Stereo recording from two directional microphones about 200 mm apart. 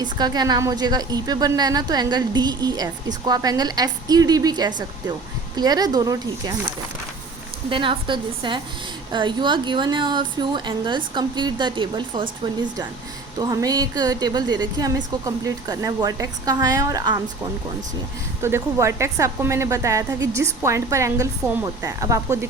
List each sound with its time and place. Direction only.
0.0 s a woman's voice: 20° right (ahead or behind)
7.7 s a woman's voice: 25° right (ahead or behind)
13.4 s a woman's voice: 20° right (ahead or behind)
18.4 s a woman's voice: 15° right (ahead or behind)